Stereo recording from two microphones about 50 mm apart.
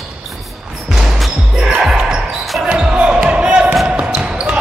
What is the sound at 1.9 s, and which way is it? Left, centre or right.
Basketball bounce, centre.